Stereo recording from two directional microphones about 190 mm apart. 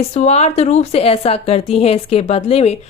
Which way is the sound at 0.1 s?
35° left (ahead or behind).